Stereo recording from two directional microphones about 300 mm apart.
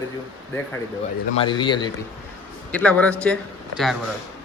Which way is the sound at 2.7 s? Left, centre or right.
Centre.